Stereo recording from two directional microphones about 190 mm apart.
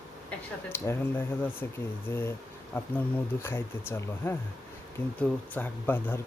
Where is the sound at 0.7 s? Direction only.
10° left (ahead or behind).